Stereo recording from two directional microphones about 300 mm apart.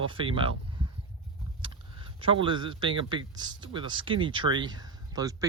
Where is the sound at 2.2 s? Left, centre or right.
Centre.